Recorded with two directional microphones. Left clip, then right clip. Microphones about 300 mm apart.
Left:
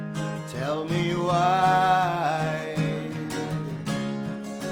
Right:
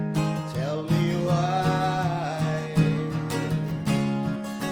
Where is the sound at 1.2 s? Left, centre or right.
Left.